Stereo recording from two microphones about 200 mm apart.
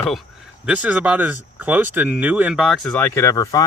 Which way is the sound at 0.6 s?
5° right (ahead or behind).